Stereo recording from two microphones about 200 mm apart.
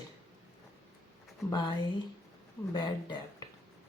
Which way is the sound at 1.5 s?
20° left (ahead or behind).